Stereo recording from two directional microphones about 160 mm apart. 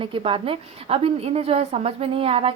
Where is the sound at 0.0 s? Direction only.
35° right (ahead or behind).